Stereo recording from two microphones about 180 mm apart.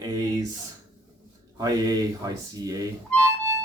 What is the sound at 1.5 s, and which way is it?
Speech, 20° right (ahead or behind).